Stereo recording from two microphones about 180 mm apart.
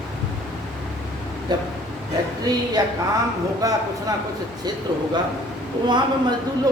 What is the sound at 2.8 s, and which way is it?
Speech, 20° right (ahead or behind).